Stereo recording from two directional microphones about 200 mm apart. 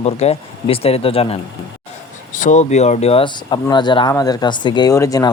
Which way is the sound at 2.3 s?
40° left (ahead or behind).